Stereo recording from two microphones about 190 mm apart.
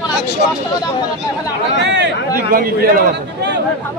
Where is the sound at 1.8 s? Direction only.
65° right (ahead or behind).